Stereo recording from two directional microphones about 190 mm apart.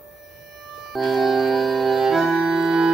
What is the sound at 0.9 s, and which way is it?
Music, centre (ahead or behind).